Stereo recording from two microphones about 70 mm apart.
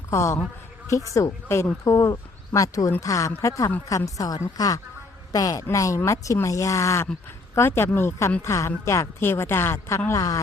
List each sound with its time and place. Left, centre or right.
0.1 s a man's voice: left
5.7 s speech: left
10.1 s speech: left